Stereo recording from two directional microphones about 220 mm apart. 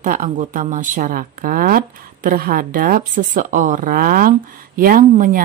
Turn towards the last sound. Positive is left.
turn(degrees=-40)  # may be behind; listen again after turning